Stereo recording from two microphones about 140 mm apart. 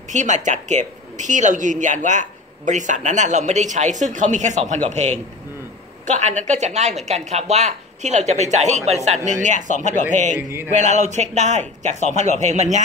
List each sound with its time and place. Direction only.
0.1 s speech: 60° right (ahead or behind)